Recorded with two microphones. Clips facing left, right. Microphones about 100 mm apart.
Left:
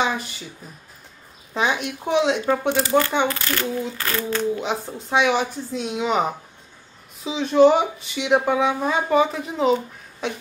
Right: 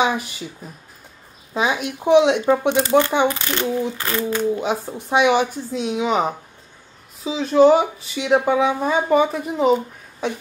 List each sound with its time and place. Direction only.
0.0 s speech: 10° right (ahead or behind)
1.5 s speech: 5° right (ahead or behind)